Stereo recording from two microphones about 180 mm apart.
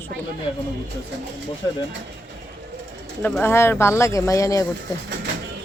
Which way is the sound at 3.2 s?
10° left (ahead or behind).